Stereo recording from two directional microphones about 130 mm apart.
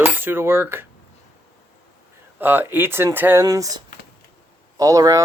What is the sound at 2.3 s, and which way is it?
Cutlery, 15° right (ahead or behind).